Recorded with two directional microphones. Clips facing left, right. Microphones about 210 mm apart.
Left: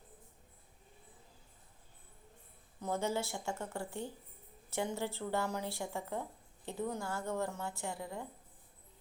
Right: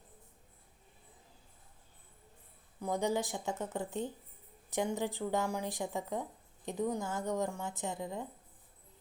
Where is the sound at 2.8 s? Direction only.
15° right (ahead or behind).